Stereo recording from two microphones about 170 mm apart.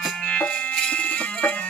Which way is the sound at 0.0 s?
5° left (ahead or behind).